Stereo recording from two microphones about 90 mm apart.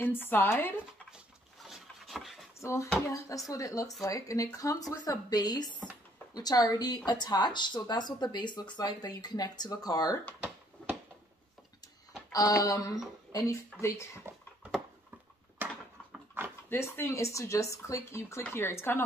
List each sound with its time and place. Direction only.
0.0 s speech: 25° left (ahead or behind)
1.6 s vehicle: centre (ahead or behind)
2.6 s speech: 35° left (ahead or behind)
12.3 s speech: 40° left (ahead or behind)
14.3 s a sound: 30° right (ahead or behind)
15.6 s a sound: 20° right (ahead or behind)
16.6 s speech: 25° left (ahead or behind)